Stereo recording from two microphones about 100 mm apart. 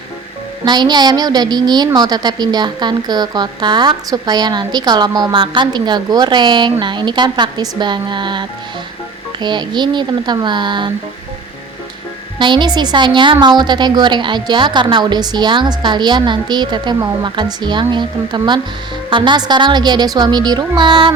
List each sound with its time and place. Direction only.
0.6 s a woman's voice: 45° right (ahead or behind)
12.4 s a woman's voice: 50° right (ahead or behind)